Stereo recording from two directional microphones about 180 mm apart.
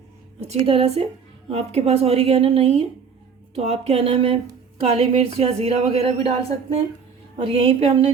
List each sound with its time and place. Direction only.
0.5 s a woman's voice: 30° right (ahead or behind)